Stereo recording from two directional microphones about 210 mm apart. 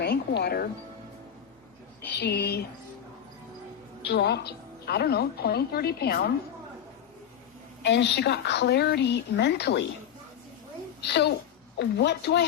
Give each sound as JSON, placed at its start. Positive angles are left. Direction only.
{"t": 0.0, "sound": "music", "side_deg": 50}
{"t": 2.1, "sound": "a woman's voice", "side_deg": 50}
{"t": 4.0, "sound": "a woman's voice", "side_deg": 50}
{"t": 7.9, "sound": "a woman's voice", "side_deg": 55}
{"t": 11.0, "sound": "a woman's voice", "side_deg": 55}